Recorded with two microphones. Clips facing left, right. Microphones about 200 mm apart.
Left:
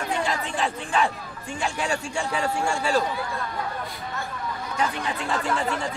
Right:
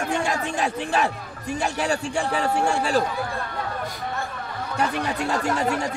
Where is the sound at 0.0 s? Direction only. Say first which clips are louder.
Right 2 dB; 50° right (ahead or behind).